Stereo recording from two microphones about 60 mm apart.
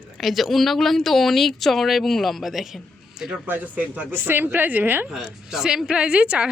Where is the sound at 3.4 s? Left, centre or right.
Right.